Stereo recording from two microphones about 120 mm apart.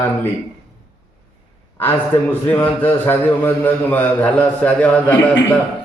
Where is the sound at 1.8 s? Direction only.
15° left (ahead or behind).